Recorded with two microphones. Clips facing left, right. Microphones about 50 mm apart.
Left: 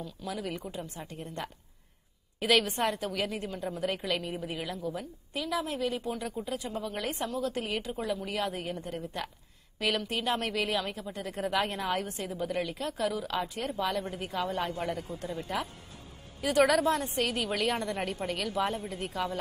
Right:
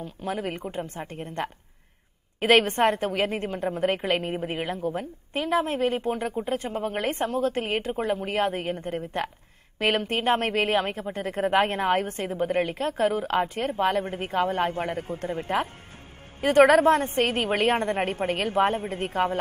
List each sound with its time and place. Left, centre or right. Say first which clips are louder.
0.0 s a woman's voice: right 6 dB; right